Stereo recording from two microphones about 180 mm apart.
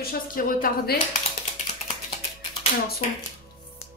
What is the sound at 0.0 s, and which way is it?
Speech, 50° left (ahead or behind).